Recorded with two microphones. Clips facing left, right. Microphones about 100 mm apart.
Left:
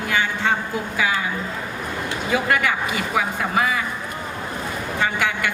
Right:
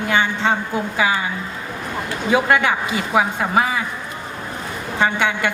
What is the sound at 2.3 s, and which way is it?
A woman's voice, 25° right (ahead or behind).